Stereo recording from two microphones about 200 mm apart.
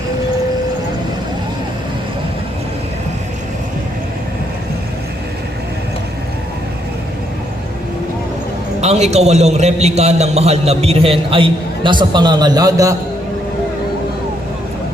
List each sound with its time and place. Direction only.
8.8 s a man's voice: 35° right (ahead or behind); by 13.0 s 15° right (ahead or behind)